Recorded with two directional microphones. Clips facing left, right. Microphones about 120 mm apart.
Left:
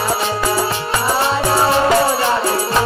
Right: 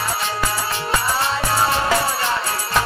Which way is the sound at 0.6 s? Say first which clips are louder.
Left 4 dB; 30° left (ahead or behind).